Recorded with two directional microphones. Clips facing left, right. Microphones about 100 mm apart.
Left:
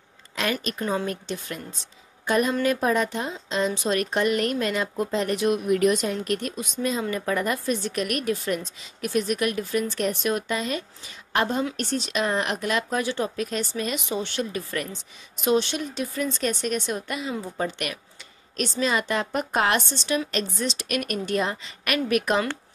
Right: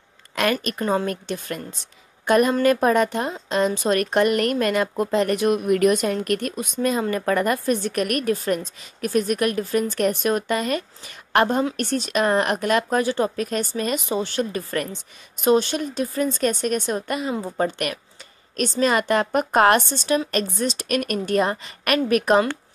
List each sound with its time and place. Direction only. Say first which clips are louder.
0.4 s a woman's voice: right 5 dB; 55° right (ahead or behind)